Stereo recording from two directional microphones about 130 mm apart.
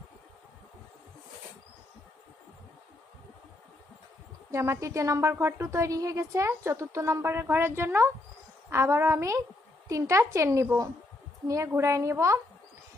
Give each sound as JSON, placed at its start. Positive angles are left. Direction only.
{"t": 4.5, "sound": "speech", "side_deg": -20}